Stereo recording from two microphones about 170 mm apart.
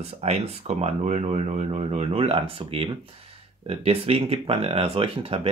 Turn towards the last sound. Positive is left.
turn(degrees=-35)  # may be behind; listen again after turning